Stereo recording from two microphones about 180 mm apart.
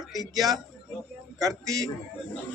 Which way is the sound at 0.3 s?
Centre (ahead or behind).